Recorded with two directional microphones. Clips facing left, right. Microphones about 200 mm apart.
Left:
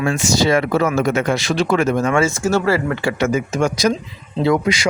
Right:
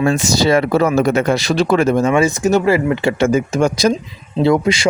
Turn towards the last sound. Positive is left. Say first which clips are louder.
# right 3 dB
turn(degrees=-30)  # may be behind; listen again after turning